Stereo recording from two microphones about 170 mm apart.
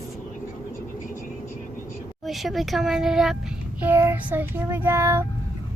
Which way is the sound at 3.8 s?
10° right (ahead or behind).